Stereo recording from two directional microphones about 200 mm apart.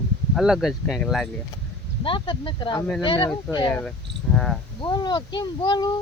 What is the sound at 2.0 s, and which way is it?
Speech, 25° left (ahead or behind).